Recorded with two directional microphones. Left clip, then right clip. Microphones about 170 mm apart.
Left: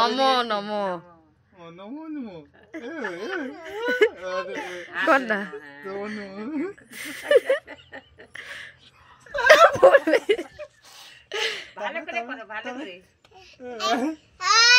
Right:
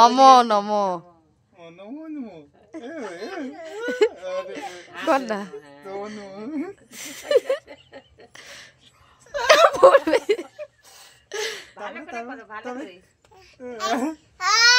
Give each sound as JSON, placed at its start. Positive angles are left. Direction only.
{"t": 0.0, "sound": "a man's voice", "side_deg": -45}
{"t": 2.9, "sound": "speech", "side_deg": -15}
{"t": 13.7, "sound": "speech", "side_deg": -25}